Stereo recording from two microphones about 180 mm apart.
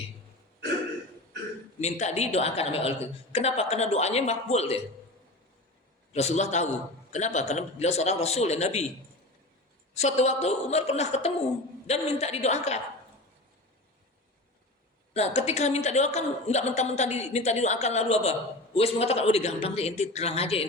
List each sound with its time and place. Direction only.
1.8 s a man's voice: 40° left (ahead or behind)
6.1 s a man's voice: 35° left (ahead or behind)
9.9 s a man's voice: 40° left (ahead or behind)
15.1 s a man's voice: 35° left (ahead or behind)